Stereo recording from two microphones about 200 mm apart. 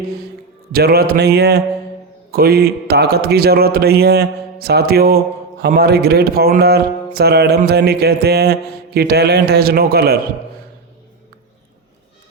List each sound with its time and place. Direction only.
0.7 s speech: 50° right (ahead or behind)